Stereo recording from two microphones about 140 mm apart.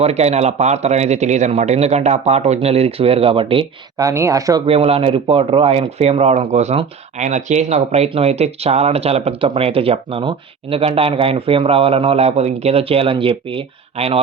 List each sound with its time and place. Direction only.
0.0 s speech: 50° right (ahead or behind)
3.9 s speech: 20° right (ahead or behind)
4.6 s speech: 45° right (ahead or behind)